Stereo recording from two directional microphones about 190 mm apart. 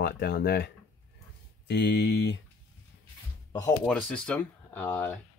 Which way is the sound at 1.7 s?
60° left (ahead or behind).